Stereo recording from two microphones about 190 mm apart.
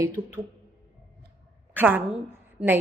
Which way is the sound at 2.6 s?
30° right (ahead or behind).